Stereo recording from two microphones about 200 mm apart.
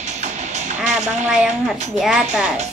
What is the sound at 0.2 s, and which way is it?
Music, 35° right (ahead or behind).